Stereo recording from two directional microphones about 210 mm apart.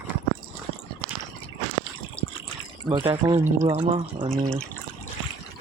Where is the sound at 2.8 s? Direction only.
20° right (ahead or behind).